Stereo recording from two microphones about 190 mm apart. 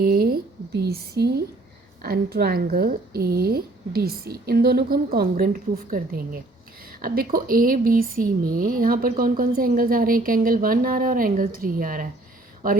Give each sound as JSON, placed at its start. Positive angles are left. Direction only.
{"t": 0.0, "sound": "speech", "side_deg": -55}